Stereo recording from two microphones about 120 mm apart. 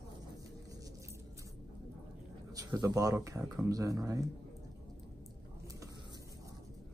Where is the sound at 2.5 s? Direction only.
30° right (ahead or behind).